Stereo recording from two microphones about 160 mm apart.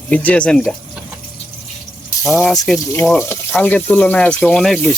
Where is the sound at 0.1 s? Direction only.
10° left (ahead or behind).